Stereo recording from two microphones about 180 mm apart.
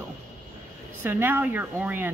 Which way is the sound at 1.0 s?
10° right (ahead or behind).